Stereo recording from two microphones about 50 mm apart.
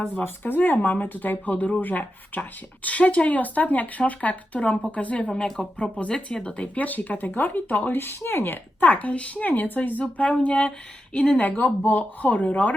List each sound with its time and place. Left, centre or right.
0.2 s speech: left
8.8 s speech: left